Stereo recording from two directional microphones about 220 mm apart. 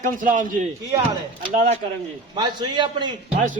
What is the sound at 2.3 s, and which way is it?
Speech, 20° right (ahead or behind).